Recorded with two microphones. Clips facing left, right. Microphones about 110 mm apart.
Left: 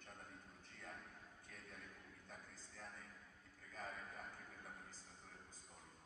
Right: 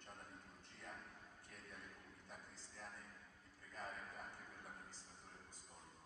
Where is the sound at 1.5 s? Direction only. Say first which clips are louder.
Even; 10° right (ahead or behind).